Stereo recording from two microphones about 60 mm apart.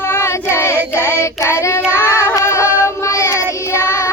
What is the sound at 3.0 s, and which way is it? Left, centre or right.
Child singing, left.